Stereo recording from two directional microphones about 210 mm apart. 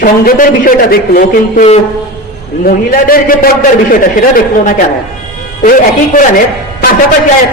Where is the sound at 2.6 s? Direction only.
45° left (ahead or behind).